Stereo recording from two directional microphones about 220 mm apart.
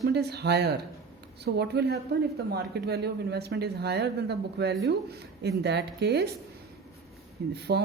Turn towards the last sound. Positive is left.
turn(degrees=-45)  # may be behind; listen again after turning